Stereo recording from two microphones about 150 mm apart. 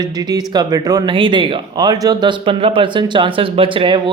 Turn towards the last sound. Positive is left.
turn(degrees=-35)  # may be behind; listen again after turning